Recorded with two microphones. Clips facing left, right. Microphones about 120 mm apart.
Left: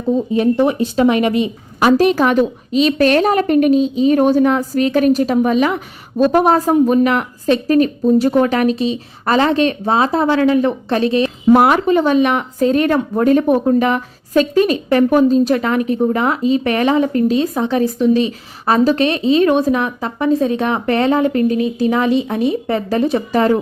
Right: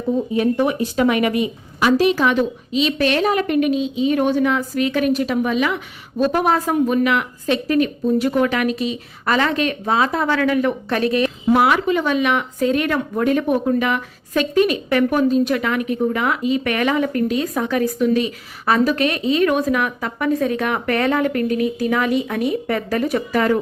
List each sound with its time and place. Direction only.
0.3 s speech: 30° left (ahead or behind)
1.9 s a woman's voice: 45° left (ahead or behind); by 11.3 s 25° left (ahead or behind)
11.5 s speech: 45° left (ahead or behind)